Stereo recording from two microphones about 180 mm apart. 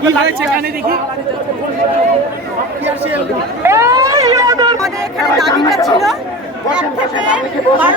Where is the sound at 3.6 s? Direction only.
15° right (ahead or behind).